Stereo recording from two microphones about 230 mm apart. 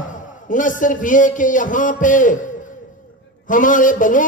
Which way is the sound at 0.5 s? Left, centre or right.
Left.